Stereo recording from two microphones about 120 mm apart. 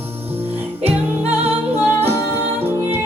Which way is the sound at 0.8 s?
55° right (ahead or behind).